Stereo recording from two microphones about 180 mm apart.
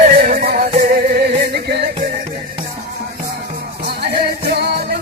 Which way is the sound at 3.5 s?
60° right (ahead or behind).